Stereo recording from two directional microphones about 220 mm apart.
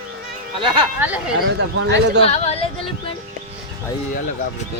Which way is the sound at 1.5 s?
55° right (ahead or behind).